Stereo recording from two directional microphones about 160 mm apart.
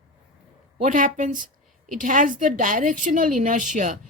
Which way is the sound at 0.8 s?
55° right (ahead or behind).